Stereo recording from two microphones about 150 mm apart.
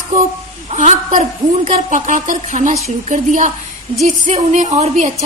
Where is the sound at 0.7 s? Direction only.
55° right (ahead or behind).